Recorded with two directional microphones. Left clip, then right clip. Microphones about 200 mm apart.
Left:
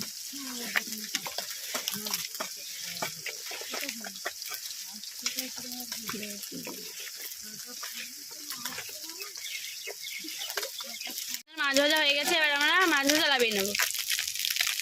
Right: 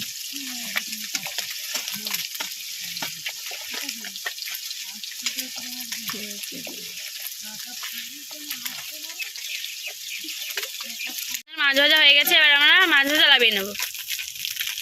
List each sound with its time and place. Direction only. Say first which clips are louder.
11.5 s speech: right 8 dB; 5° left (ahead or behind)